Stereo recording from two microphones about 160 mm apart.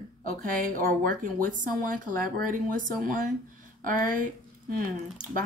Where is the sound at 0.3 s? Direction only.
60° right (ahead or behind).